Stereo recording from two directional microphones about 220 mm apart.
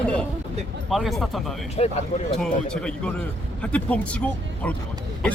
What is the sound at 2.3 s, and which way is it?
Speech, 5° left (ahead or behind).